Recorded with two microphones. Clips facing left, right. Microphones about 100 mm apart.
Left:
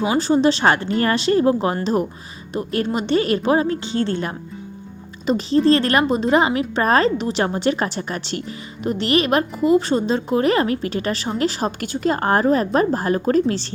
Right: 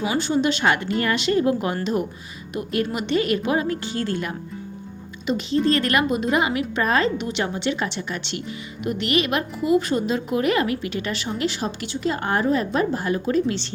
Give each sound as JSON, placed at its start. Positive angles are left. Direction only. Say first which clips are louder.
{"t": 0.0, "sound": "a woman's voice", "louder": "left 5 dB", "side_deg": 35}